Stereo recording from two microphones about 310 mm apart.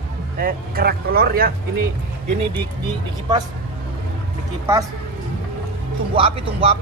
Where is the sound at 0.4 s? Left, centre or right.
Right.